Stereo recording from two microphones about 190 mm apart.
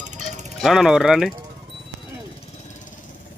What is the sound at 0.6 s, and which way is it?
Speech, centre (ahead or behind).